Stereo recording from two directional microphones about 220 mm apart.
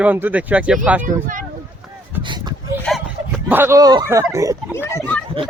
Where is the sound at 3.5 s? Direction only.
10° right (ahead or behind).